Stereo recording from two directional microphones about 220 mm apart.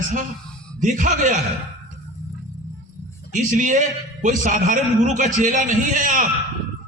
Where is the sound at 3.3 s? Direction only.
35° right (ahead or behind).